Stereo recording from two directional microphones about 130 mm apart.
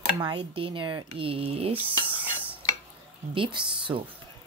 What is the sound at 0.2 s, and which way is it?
Speech, 45° right (ahead or behind).